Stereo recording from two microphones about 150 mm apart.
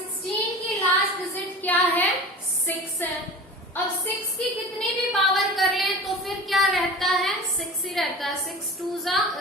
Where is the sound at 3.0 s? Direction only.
15° left (ahead or behind).